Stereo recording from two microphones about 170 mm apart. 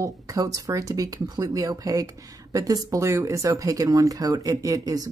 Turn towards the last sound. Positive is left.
turn(degrees=-20)  # may be behind; listen again after turning